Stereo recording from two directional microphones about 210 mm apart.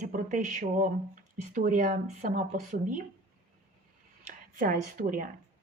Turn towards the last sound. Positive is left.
turn(degrees=-40)  # may be behind; listen again after turning